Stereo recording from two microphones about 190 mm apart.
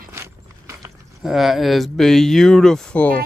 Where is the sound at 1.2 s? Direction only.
Centre (ahead or behind).